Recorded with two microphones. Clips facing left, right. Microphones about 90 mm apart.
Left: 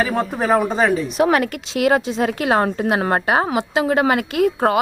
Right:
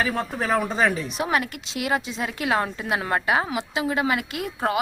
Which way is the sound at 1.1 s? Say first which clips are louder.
Left 8 dB; 50° left (ahead or behind).